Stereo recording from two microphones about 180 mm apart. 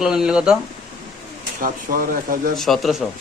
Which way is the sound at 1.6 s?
50° right (ahead or behind).